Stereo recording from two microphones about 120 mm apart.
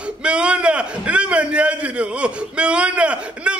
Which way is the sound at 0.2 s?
10° right (ahead or behind).